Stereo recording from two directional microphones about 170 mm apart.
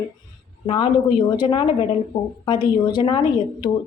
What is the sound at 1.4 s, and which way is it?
A woman's voice, 25° left (ahead or behind).